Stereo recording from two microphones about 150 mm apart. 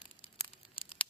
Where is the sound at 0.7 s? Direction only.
40° left (ahead or behind).